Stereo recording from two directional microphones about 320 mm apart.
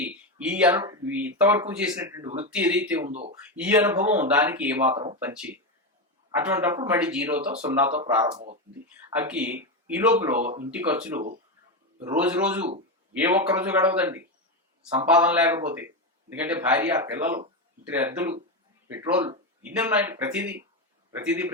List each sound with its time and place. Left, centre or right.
0.3 s speech: centre
3.1 s speech: right
3.5 s speech: centre
4.9 s speech: centre
5.2 s speech: centre
8.3 s speech: right
9.0 s speech: centre